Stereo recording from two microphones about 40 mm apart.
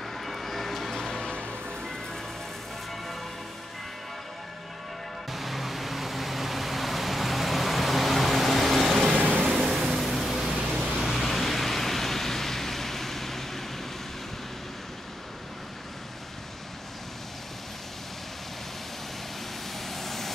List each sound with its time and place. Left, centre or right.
0.2 s vehicle: centre
5.3 s vehicle: centre
9.1 s vehicle: right
9.6 s vehicle: centre
11.0 s pink noise: centre
19.9 s vehicle: centre